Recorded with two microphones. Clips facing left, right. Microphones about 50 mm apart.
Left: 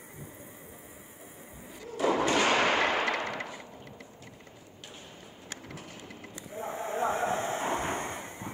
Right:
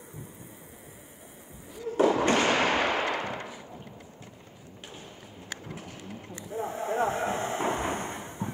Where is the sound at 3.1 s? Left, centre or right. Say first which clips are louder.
Even; left.